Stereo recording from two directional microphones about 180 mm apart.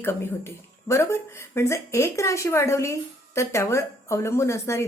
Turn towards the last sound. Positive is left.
turn(degrees=15)  # may be behind; listen again after turning